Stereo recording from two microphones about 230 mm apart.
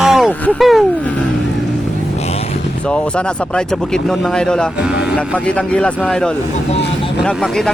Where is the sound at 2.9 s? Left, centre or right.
Centre.